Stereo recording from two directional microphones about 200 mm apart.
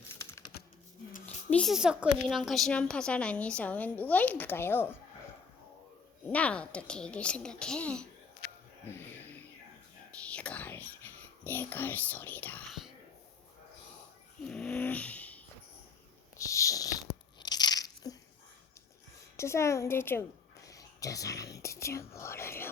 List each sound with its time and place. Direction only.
0.2 s typing: 15° left (ahead or behind)
1.5 s a woman's voice: 5° left (ahead or behind)
6.2 s a woman's voice: 5° left (ahead or behind)
8.9 s a sound: 10° left (ahead or behind)
10.2 s whispering: 5° left (ahead or behind)
14.4 s vehicle: 5° left (ahead or behind)
16.4 s a sound: 15° left (ahead or behind)
17.4 s crunch: 20° left (ahead or behind)
19.4 s speech: 15° left (ahead or behind)